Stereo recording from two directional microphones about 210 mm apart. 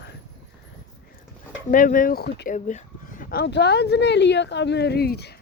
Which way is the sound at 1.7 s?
40° left (ahead or behind).